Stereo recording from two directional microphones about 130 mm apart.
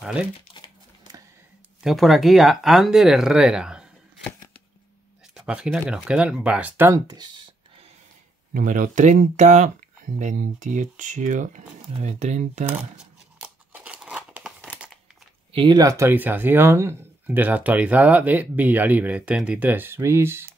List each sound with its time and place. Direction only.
0.0 s speech: 5° right (ahead or behind)
0.5 s crumpling: 35° left (ahead or behind)
1.8 s speech: centre (ahead or behind)
5.3 s speech: 5° right (ahead or behind)
7.1 s a sound: 35° right (ahead or behind)
8.5 s speech: 90° right; by 12.6 s 65° right (ahead or behind)
12.9 s crumpling: 10° right (ahead or behind)
15.5 s speech: 35° right (ahead or behind); by 20.5 s 20° right (ahead or behind)